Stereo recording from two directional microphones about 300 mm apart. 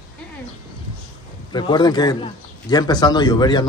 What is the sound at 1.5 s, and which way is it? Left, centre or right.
Speech, centre.